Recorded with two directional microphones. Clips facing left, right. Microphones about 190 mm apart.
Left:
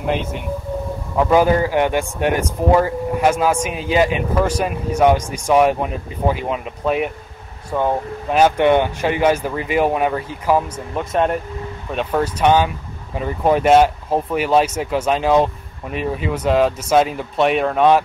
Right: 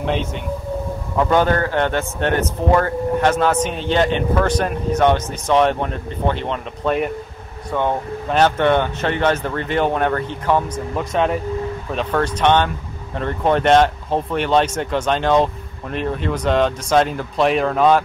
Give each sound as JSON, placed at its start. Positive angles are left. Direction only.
{"t": 0.0, "sound": "speech", "side_deg": 5}